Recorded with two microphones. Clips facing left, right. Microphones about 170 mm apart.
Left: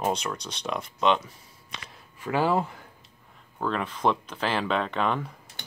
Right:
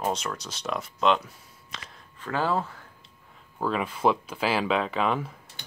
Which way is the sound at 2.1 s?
10° left (ahead or behind).